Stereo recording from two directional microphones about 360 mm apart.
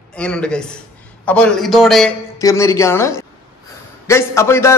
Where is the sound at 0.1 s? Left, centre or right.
Centre.